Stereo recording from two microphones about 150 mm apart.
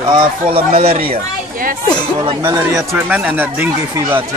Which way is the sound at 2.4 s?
20° right (ahead or behind).